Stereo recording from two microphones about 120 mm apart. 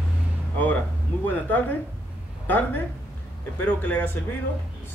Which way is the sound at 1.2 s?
15° left (ahead or behind).